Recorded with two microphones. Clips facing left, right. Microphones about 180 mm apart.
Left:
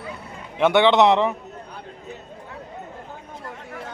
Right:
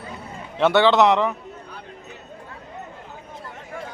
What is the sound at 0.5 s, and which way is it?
Speech, 15° left (ahead or behind).